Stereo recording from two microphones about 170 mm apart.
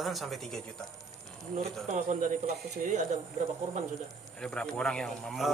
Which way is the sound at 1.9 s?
45° right (ahead or behind).